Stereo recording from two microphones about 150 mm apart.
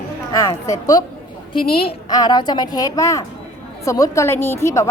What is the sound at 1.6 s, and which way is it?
Speech, 90° left.